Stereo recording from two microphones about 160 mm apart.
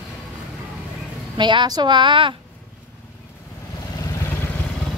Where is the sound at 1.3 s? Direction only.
30° right (ahead or behind).